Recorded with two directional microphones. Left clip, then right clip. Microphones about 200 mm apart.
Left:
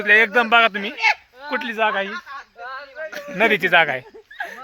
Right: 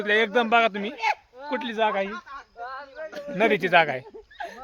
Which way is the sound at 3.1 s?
15° right (ahead or behind).